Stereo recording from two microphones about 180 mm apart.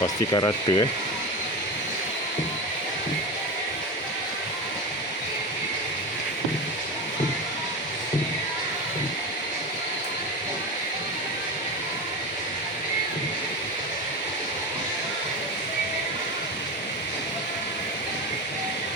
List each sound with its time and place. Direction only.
0.0 s speech: 25° left (ahead or behind)